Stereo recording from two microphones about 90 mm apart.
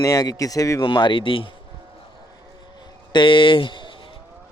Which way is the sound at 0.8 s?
60° left (ahead or behind).